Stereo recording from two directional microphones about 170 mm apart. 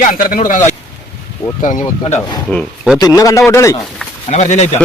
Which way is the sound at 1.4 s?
35° left (ahead or behind).